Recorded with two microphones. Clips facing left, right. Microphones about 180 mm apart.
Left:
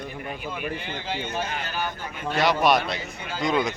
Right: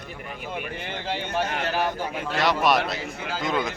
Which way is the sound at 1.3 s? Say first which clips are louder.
Right 4 dB; 65° right (ahead or behind).